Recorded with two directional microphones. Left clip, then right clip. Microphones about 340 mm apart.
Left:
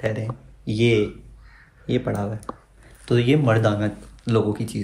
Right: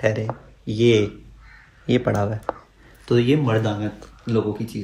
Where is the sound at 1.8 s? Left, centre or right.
Right.